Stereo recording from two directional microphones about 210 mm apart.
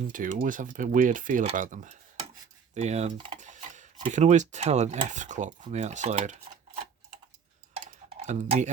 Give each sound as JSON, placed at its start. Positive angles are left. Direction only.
{"t": 0.1, "sound": "speech", "side_deg": -40}
{"t": 2.7, "sound": "typing", "side_deg": -30}
{"t": 3.5, "sound": "speech", "side_deg": -35}
{"t": 7.7, "sound": "dishes", "side_deg": -30}